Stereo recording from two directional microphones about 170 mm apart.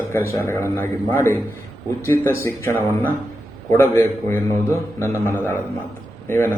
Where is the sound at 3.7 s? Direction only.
15° left (ahead or behind).